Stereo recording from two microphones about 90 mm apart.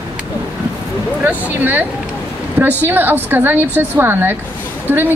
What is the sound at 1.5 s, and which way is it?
Speech, 20° right (ahead or behind).